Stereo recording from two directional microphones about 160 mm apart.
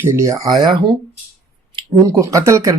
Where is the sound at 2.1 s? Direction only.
20° right (ahead or behind).